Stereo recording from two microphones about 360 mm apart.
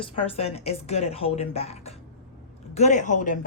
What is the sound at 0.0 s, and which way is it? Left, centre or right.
Speech, centre.